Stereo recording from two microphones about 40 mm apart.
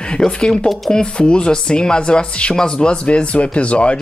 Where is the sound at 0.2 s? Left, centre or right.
Left.